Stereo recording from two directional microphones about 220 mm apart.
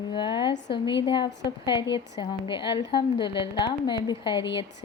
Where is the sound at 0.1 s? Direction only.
20° left (ahead or behind).